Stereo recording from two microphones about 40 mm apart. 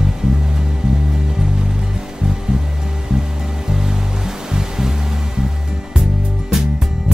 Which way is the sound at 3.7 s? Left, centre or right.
Centre.